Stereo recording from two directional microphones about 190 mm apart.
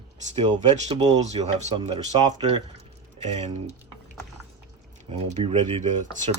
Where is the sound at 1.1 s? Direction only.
35° right (ahead or behind).